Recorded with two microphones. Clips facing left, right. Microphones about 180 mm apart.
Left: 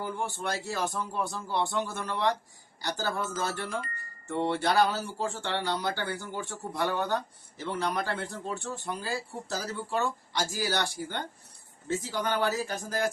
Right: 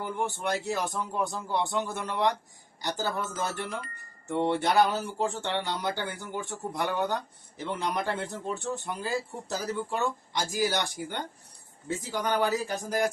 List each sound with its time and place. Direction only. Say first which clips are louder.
0.2 s speech: right 3 dB; 20° right (ahead or behind)